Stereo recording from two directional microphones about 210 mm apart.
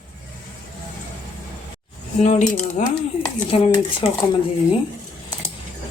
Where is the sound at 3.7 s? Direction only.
20° left (ahead or behind).